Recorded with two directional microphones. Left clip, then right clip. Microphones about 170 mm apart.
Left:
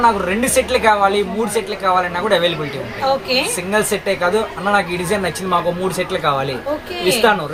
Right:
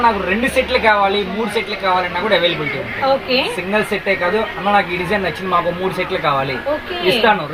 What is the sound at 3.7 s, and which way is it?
Speech, centre (ahead or behind).